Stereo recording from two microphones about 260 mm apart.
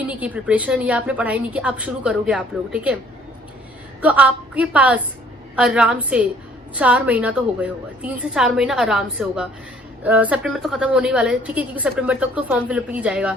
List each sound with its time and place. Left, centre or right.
0.1 s a woman's voice: centre
4.0 s a woman's voice: centre